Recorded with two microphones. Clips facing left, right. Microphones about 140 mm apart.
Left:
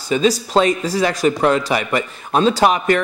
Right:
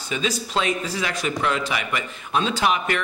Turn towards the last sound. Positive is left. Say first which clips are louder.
# left 7 dB
turn(degrees=40)  # may be behind; listen again after turning